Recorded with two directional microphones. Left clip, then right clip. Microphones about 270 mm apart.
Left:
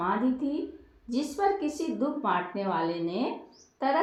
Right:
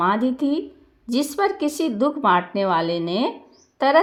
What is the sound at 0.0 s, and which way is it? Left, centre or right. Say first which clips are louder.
Speech: right 8 dB; right.